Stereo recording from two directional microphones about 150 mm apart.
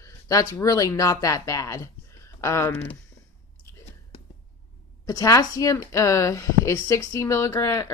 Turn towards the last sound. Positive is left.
turn(degrees=20)  # may be behind; listen again after turning